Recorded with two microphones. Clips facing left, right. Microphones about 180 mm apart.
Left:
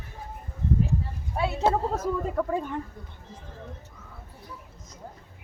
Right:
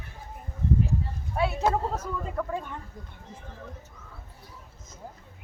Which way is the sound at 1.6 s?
30° left (ahead or behind).